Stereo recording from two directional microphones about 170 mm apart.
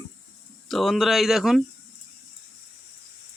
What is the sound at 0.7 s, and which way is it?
Speech, centre (ahead or behind).